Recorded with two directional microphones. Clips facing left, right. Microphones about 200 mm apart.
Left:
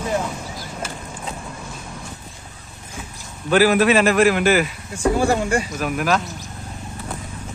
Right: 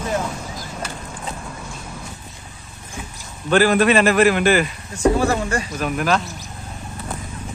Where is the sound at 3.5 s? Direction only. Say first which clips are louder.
Even; 5° left (ahead or behind).